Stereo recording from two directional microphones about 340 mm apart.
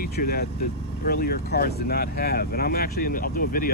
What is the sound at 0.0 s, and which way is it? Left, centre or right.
Speech, left.